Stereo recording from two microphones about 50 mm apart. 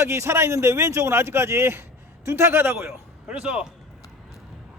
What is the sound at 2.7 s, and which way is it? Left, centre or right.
Speech, right.